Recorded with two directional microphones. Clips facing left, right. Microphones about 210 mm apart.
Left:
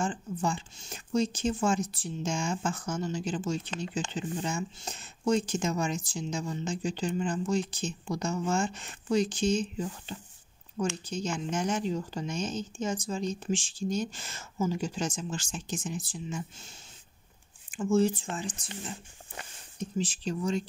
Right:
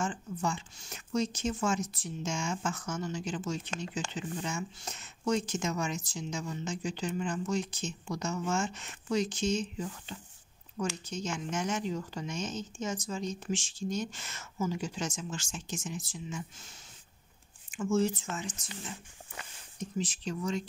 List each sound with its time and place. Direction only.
0.0 s speech: 30° left (ahead or behind)